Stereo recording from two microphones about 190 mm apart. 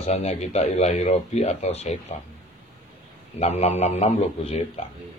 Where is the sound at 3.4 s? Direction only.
35° left (ahead or behind).